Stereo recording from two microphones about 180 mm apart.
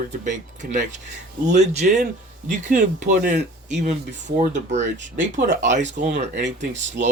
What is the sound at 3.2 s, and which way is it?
Speech, 40° right (ahead or behind).